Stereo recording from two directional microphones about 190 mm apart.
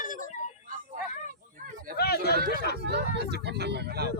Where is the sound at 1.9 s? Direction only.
55° left (ahead or behind).